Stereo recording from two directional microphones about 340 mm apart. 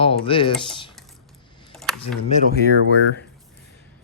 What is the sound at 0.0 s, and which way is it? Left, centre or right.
Speech, centre.